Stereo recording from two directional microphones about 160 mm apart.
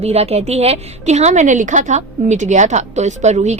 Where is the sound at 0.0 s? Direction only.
40° right (ahead or behind).